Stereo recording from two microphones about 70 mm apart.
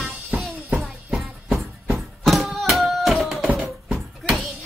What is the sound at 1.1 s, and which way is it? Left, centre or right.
Music, centre.